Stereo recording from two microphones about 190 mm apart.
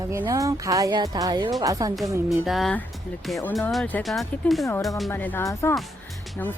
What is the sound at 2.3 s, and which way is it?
Speech, centre (ahead or behind).